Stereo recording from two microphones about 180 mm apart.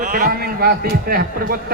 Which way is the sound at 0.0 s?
50° right (ahead or behind).